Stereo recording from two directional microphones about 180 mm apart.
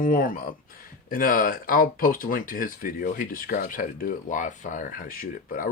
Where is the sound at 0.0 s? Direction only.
50° left (ahead or behind).